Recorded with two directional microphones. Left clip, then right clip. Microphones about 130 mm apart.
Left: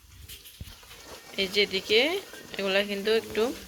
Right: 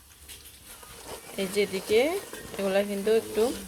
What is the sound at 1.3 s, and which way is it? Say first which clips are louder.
Speech: left 2 dB; centre (ahead or behind).